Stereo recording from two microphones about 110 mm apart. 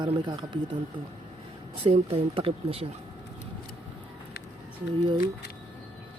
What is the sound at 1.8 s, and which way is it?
Speech, 60° right (ahead or behind).